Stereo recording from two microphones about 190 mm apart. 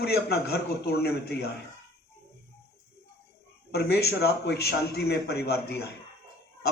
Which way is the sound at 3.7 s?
60° left (ahead or behind).